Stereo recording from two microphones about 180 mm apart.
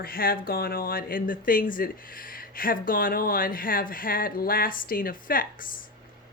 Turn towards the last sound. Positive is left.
turn(degrees=50)  # may be behind; listen again after turning